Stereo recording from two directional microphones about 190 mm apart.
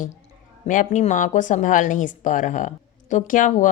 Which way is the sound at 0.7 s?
40° left (ahead or behind).